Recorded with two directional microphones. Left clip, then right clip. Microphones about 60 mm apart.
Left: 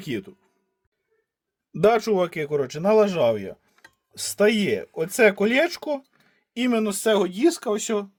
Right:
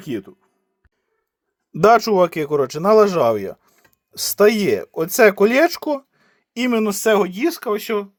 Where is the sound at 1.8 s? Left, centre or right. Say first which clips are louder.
Right 6 dB; right.